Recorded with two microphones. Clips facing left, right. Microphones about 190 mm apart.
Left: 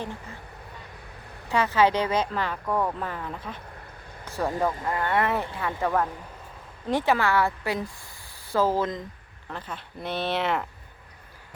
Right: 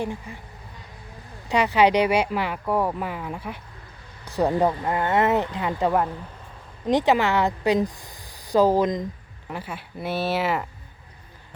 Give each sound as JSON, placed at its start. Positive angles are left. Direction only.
{"t": 0.0, "sound": "speech", "side_deg": -15}
{"t": 1.5, "sound": "speech", "side_deg": -15}